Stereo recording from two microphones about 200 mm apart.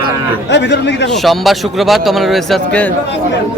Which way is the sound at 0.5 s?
60° left (ahead or behind).